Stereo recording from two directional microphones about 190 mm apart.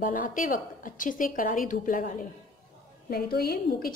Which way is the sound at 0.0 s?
45° left (ahead or behind).